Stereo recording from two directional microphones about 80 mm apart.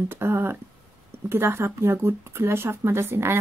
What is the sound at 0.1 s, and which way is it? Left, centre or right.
Speech, right.